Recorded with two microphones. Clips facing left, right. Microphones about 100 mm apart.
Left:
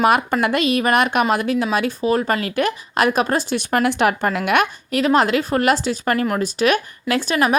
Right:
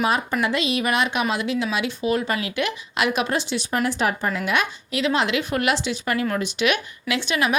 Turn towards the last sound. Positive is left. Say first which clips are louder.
# left 4 dB
turn(degrees=40)  # may be behind; listen again after turning